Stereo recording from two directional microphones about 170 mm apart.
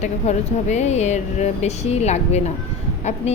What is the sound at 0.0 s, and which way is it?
A woman's voice, 40° left (ahead or behind).